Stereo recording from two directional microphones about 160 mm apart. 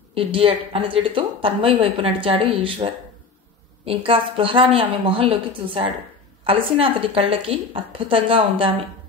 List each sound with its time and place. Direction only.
0.1 s speech: 35° right (ahead or behind)